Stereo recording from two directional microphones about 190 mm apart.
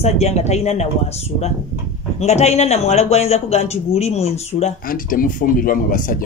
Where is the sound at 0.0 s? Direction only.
35° left (ahead or behind).